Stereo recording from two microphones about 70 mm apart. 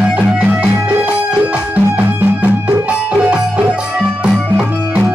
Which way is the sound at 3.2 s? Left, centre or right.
Right.